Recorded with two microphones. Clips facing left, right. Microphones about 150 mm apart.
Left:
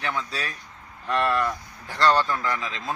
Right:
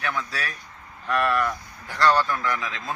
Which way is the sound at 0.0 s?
20° left (ahead or behind).